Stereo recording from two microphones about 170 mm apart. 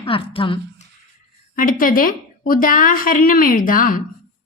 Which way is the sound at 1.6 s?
55° left (ahead or behind).